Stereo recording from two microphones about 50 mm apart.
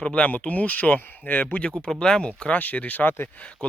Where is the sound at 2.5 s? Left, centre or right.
Left.